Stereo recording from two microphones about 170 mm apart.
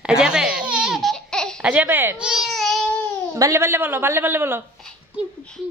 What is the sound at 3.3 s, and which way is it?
A woman's voice, 15° right (ahead or behind).